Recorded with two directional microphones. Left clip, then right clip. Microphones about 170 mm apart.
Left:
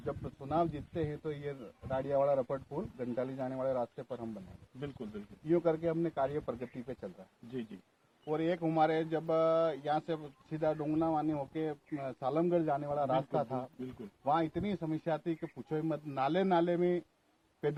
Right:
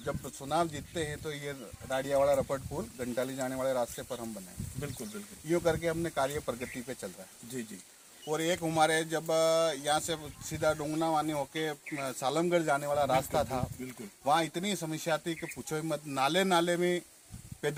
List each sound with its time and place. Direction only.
0.0 s speech: centre (ahead or behind)
5.5 s speech: centre (ahead or behind)
7.5 s speech: 20° right (ahead or behind)
8.3 s speech: centre (ahead or behind)